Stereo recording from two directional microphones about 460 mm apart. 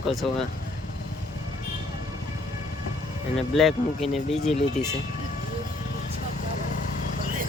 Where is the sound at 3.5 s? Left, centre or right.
Centre.